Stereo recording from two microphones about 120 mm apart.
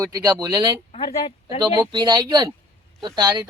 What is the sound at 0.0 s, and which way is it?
Speech, 30° right (ahead or behind).